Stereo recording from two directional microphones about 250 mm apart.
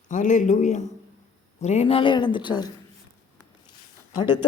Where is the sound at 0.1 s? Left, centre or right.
Left.